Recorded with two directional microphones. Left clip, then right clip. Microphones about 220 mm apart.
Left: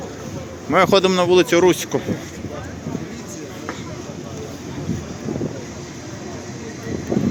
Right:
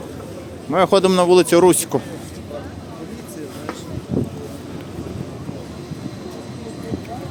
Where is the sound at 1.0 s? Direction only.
15° right (ahead or behind).